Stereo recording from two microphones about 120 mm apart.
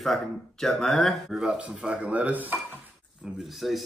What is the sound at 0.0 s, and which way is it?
Speech, centre (ahead or behind).